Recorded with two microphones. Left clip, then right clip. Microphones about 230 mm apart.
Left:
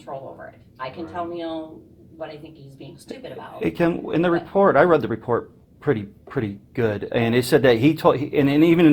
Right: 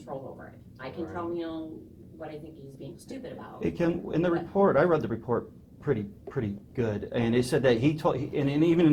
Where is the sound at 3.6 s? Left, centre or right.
Left.